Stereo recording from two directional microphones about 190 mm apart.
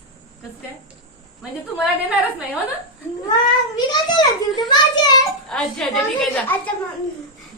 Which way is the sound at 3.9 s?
20° left (ahead or behind).